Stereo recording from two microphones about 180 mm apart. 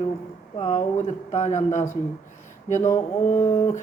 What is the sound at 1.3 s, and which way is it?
Speech, 40° left (ahead or behind).